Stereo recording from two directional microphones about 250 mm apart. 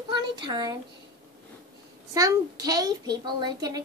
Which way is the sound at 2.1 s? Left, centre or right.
Centre.